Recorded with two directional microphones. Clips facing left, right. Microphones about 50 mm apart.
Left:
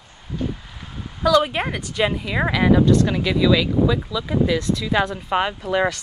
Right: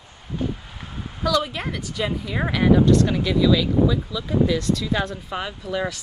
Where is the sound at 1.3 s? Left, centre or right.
Left.